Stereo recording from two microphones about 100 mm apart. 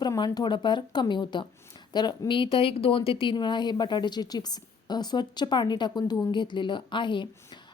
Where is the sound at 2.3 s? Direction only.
55° left (ahead or behind).